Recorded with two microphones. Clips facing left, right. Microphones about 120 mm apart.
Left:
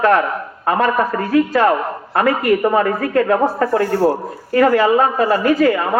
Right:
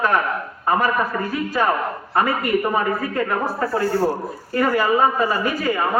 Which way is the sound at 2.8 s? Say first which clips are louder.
Left 6 dB; 90° left.